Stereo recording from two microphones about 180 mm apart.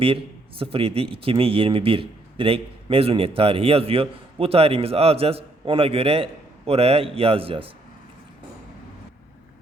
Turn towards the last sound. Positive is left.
turn(degrees=-30)  # may be behind; listen again after turning